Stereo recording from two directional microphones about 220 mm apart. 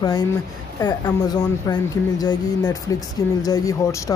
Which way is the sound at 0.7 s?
15° left (ahead or behind).